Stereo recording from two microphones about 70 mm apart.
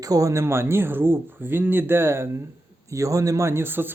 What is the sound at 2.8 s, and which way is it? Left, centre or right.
A man's voice, right.